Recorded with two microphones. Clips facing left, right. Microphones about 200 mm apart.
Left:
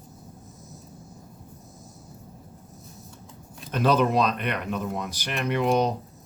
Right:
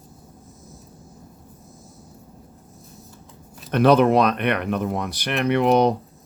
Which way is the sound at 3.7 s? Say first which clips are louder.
Right 6 dB; 65° right (ahead or behind).